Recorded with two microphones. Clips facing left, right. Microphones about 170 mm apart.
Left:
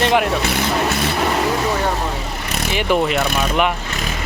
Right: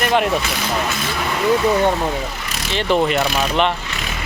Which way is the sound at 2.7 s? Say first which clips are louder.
Right 1 dB; 10° left (ahead or behind).